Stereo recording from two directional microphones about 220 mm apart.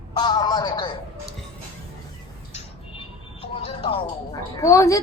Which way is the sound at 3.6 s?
25° left (ahead or behind).